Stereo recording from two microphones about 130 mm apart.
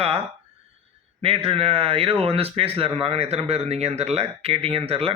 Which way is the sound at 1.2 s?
45° right (ahead or behind).